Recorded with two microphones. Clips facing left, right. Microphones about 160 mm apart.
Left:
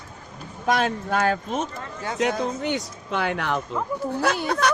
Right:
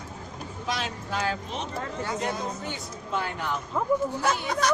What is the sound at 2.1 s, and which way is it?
Speech, 85° left.